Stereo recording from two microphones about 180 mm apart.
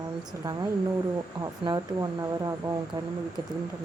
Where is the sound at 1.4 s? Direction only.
20° right (ahead or behind).